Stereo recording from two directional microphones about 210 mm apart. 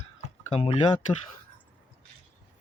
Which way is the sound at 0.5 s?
25° left (ahead or behind).